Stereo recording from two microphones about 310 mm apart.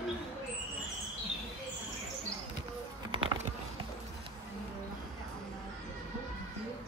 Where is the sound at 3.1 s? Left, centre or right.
Centre.